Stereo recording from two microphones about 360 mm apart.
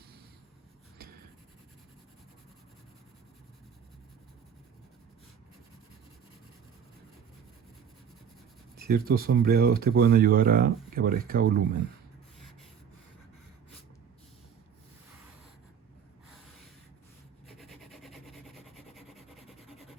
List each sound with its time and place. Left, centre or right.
8.9 s speech: right
17.6 s rub: centre